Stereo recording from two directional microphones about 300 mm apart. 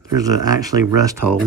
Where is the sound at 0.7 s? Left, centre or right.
Right.